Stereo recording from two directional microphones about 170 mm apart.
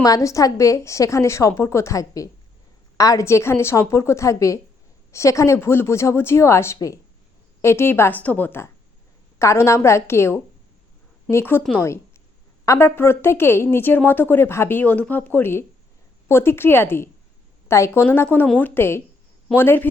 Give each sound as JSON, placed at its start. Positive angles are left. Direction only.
{"t": 0.0, "sound": "a woman's voice", "side_deg": 20}